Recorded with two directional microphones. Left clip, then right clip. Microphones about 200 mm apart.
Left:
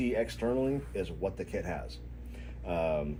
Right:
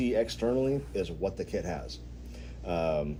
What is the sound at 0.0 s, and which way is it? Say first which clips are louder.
Speech: right 3 dB; 40° right (ahead or behind).